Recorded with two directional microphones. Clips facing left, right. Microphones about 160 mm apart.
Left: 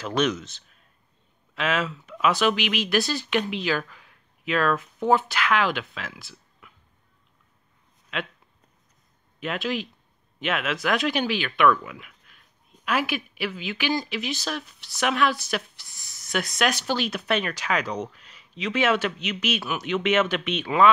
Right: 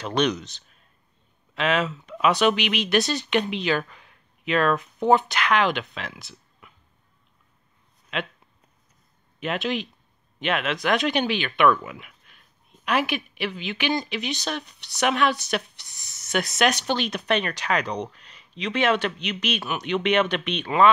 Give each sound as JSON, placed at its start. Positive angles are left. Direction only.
{"t": 0.0, "sound": "speech", "side_deg": 5}
{"t": 9.4, "sound": "speech", "side_deg": 0}